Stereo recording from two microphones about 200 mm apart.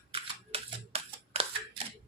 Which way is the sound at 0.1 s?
30° right (ahead or behind).